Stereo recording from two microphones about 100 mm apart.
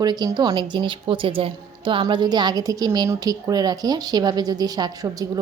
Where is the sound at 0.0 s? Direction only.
45° right (ahead or behind).